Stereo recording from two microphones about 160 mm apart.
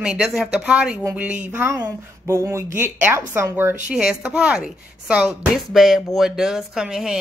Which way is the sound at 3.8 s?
5° right (ahead or behind).